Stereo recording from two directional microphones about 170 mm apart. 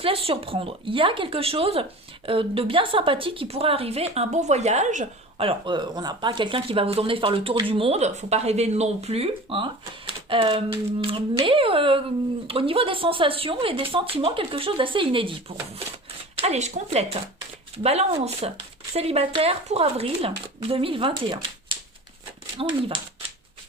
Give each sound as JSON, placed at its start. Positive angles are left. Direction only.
{"t": 0.0, "sound": "speech", "side_deg": -35}
{"t": 5.5, "sound": "speech", "side_deg": -25}
{"t": 22.6, "sound": "speech", "side_deg": -30}